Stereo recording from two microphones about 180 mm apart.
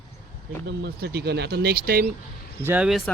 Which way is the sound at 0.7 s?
65° right (ahead or behind).